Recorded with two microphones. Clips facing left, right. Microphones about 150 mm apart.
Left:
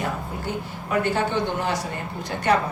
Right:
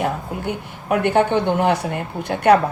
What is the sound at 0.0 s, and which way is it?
Speech, 60° right (ahead or behind).